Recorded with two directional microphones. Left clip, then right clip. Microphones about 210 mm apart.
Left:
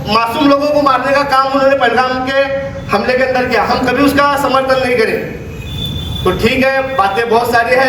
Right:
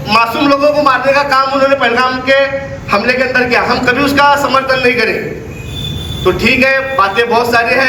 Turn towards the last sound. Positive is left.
turn(degrees=-20)  # may be behind; listen again after turning